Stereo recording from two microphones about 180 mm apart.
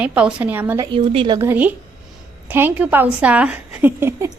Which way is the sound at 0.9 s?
30° right (ahead or behind).